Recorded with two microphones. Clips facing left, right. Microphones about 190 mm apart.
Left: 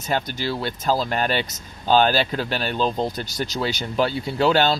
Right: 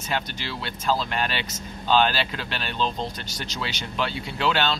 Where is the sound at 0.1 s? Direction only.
40° left (ahead or behind).